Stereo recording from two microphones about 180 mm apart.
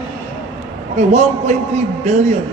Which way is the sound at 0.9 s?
40° right (ahead or behind).